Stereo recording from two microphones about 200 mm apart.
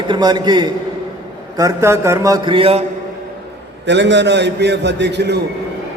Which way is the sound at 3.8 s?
60° right (ahead or behind).